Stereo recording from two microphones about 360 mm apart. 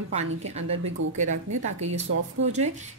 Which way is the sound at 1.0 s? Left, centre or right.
Right.